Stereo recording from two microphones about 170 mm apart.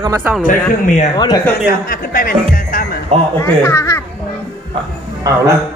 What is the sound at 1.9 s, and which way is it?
Speech, 55° left (ahead or behind).